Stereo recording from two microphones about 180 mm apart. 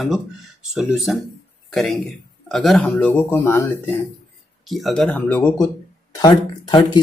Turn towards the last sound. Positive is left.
turn(degrees=20)  # may be behind; listen again after turning